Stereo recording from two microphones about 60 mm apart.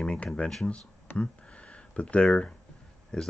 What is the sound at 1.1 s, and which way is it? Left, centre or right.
Speech, centre.